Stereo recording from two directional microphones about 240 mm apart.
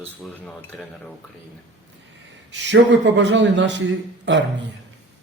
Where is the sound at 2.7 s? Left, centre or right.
Right.